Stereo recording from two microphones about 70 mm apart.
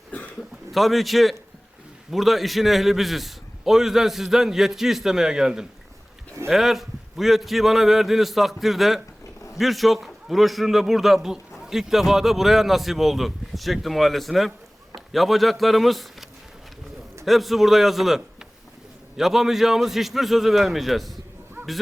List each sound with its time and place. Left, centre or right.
0.1 s a sound: left
0.7 s a man's voice: centre
17.2 s a man's voice: centre